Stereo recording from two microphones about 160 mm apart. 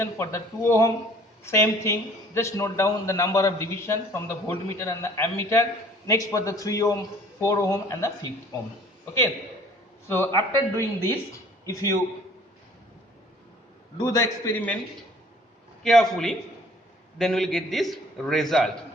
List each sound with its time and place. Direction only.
0.0 s a man's voice: 15° left (ahead or behind)
10.1 s a man's voice: 15° left (ahead or behind)
14.0 s a man's voice: 20° left (ahead or behind)
15.8 s a man's voice: 5° left (ahead or behind)